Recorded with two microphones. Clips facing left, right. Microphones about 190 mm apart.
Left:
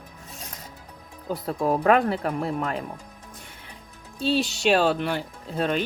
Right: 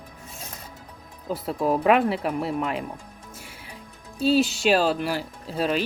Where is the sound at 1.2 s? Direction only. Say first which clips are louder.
Even; 5° right (ahead or behind).